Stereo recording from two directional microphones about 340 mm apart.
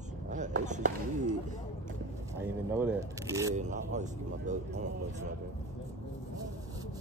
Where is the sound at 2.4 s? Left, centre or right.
Centre.